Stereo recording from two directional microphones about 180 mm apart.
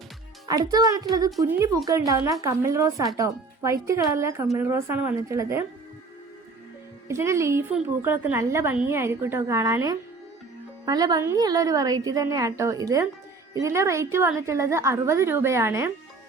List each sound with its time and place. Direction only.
0.4 s a woman's voice: 20° right (ahead or behind)
7.1 s a woman's voice: 15° right (ahead or behind)